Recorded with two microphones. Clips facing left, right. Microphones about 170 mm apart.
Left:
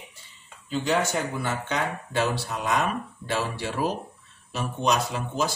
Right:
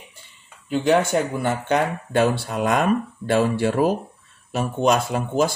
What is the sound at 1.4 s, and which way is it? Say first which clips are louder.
Speech: right 7 dB; 55° right (ahead or behind).